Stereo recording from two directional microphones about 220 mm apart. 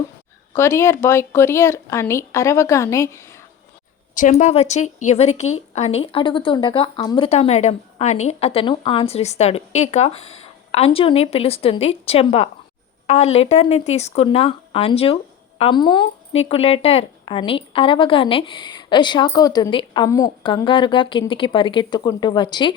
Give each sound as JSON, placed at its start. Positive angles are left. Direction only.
{"t": 0.5, "sound": "speech", "side_deg": 10}
{"t": 4.1, "sound": "a woman's voice", "side_deg": 35}